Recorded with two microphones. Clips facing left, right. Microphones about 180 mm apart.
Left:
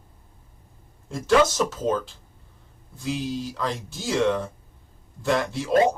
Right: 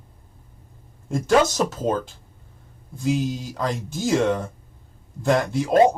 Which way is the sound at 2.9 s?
45° right (ahead or behind).